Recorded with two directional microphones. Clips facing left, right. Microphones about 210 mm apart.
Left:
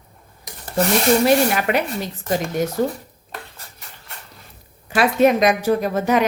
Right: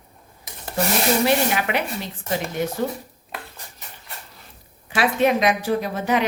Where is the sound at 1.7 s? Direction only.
45° left (ahead or behind).